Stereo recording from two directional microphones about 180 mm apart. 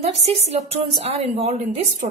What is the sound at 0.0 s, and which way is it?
A woman's voice, 35° right (ahead or behind).